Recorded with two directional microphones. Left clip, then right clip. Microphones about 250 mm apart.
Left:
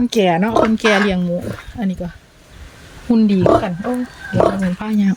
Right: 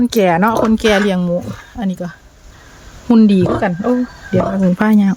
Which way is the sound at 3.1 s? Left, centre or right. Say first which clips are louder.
Right 4 dB; centre.